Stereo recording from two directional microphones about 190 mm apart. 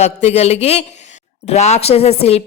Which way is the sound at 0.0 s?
35° left (ahead or behind).